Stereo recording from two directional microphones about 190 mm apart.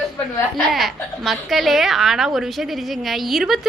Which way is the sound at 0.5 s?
Centre (ahead or behind).